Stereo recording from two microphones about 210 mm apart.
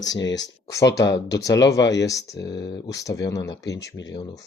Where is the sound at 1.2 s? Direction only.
15° left (ahead or behind).